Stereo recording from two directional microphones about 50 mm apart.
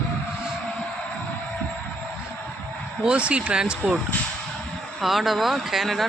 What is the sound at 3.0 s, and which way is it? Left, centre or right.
Speech, right.